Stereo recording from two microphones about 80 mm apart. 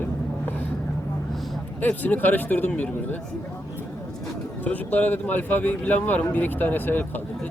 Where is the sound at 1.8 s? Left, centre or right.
Left.